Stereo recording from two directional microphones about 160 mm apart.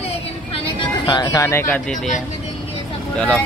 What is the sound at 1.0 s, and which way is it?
Speech, 25° left (ahead or behind).